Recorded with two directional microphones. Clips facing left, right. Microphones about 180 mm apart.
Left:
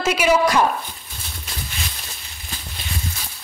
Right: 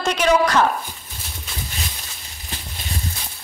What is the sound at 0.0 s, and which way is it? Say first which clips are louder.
Speech: even; 10° left (ahead or behind).